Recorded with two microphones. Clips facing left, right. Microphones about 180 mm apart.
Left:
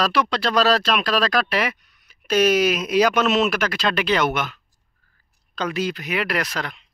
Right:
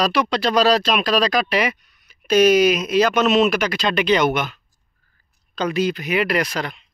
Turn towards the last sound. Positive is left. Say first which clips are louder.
# right 4 dB
turn(degrees=0)  # may be behind; listen again after turning